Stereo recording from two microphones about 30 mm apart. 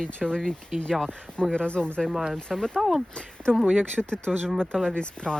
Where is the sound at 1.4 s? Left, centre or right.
Left.